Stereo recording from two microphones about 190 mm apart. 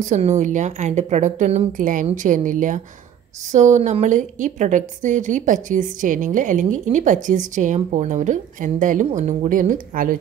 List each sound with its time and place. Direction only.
0.0 s a woman's voice: 40° right (ahead or behind)